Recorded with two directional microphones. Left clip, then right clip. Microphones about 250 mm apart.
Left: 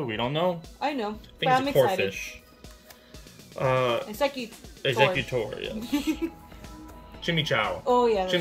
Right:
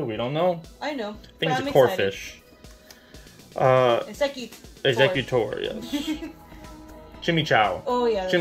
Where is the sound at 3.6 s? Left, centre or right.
Centre.